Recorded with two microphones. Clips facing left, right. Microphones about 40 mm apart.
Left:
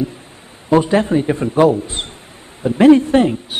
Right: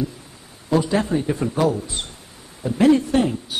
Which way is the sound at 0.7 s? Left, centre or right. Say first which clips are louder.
Left 6 dB; left.